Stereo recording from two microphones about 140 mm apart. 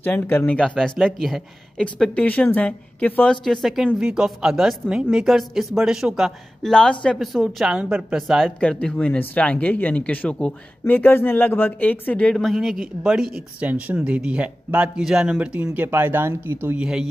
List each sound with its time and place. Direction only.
0.0 s speech: 10° left (ahead or behind)
3.6 s a man's voice: 5° right (ahead or behind)